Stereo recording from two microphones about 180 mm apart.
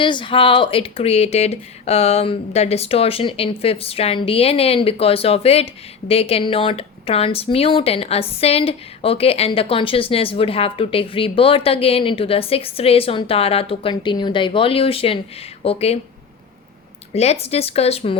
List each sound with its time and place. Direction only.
0.0 s speech: 25° left (ahead or behind)
17.2 s speech: 35° left (ahead or behind)